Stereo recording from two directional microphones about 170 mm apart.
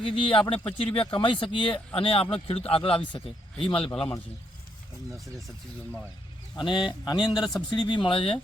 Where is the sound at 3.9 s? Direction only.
5° left (ahead or behind).